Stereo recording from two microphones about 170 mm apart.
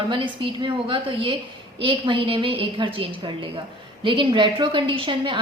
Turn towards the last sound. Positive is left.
turn(degrees=-30)  # may be behind; listen again after turning